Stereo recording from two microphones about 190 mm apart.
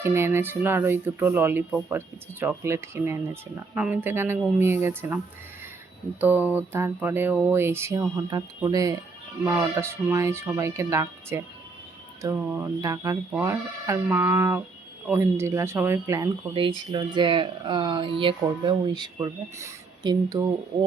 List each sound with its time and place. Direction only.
0.0 s speech: 15° right (ahead or behind)